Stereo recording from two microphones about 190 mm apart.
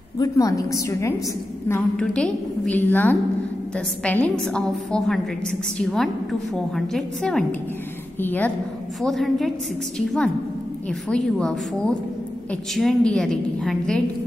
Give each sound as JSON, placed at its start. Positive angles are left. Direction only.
{"t": 0.2, "sound": "a woman's voice", "side_deg": 20}